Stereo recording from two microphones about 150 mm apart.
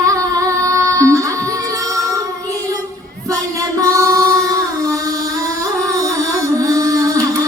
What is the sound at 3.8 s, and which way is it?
Music, 20° right (ahead or behind).